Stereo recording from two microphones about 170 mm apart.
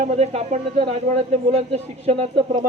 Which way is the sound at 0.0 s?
40° right (ahead or behind).